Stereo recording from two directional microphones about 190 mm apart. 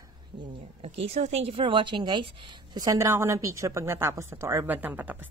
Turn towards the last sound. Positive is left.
turn(degrees=-10)  # may be behind; listen again after turning